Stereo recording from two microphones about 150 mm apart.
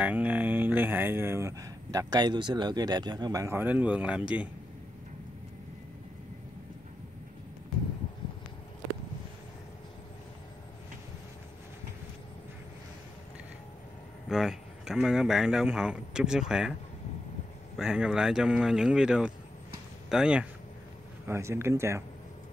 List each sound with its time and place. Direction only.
0.0 s speech: 10° right (ahead or behind)
14.3 s speech: 5° right (ahead or behind)
17.7 s speech: 5° right (ahead or behind)
21.3 s speech: 20° right (ahead or behind)